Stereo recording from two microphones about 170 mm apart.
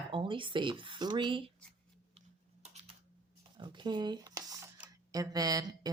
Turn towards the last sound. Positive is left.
turn(degrees=-20)  # may be behind; listen again after turning